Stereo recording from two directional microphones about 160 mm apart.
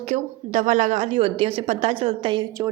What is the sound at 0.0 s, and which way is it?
A woman's voice, 45° right (ahead or behind).